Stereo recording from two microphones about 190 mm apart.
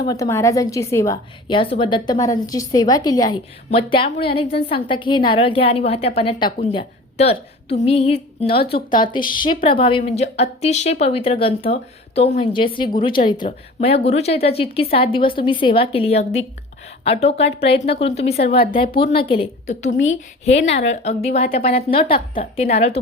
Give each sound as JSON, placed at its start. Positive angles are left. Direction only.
{"t": 0.0, "sound": "a woman's voice", "side_deg": 20}